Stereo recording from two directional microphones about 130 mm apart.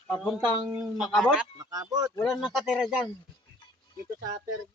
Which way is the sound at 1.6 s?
25° right (ahead or behind).